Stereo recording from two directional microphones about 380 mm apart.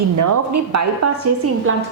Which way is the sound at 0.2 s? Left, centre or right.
Right.